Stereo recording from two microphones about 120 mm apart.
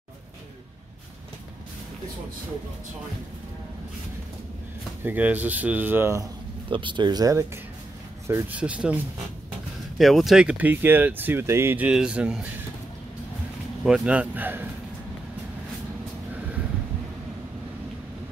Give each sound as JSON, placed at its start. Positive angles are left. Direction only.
{"t": 5.0, "sound": "speech", "side_deg": -15}
{"t": 6.7, "sound": "speech", "side_deg": -40}
{"t": 8.3, "sound": "speech", "side_deg": -15}
{"t": 9.9, "sound": "speech", "side_deg": 0}
{"t": 13.8, "sound": "speech", "side_deg": -5}